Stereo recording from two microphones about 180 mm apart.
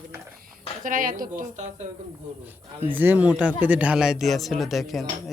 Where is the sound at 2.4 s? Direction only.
10° right (ahead or behind).